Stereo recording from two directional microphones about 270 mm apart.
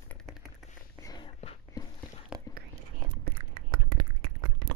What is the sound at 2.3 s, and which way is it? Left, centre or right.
Whispering, centre.